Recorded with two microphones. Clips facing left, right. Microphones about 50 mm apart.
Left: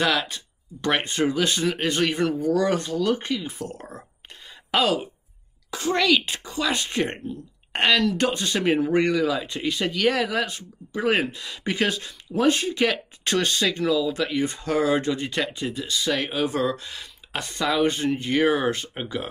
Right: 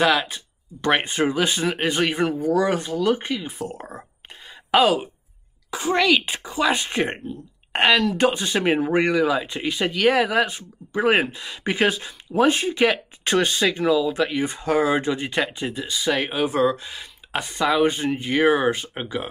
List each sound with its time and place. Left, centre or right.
0.0 s speech: centre